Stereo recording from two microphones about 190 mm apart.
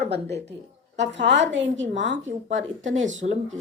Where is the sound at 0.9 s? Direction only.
70° right (ahead or behind).